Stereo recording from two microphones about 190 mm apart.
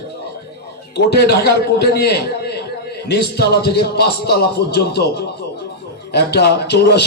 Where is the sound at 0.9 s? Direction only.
60° left (ahead or behind).